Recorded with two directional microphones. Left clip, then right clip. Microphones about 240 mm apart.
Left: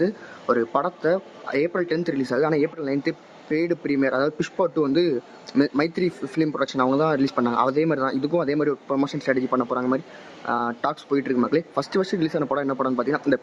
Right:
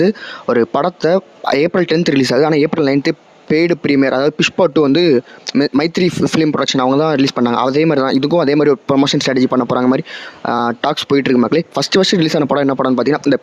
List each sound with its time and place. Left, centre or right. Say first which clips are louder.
0.0 s speech: right 9 dB; right